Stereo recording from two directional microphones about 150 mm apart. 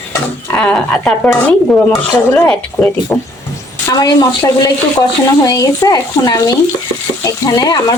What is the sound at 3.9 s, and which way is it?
Speech, 25° left (ahead or behind).